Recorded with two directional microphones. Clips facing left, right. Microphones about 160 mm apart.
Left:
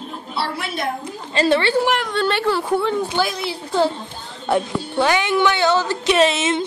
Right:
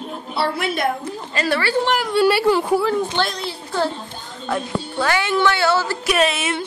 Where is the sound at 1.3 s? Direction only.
25° left (ahead or behind).